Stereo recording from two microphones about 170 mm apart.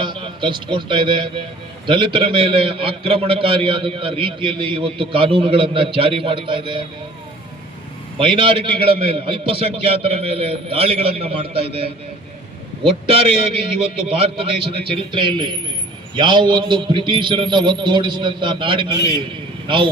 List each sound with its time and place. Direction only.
0.0 s a man's voice: 30° right (ahead or behind)
8.2 s a man's voice: 30° right (ahead or behind)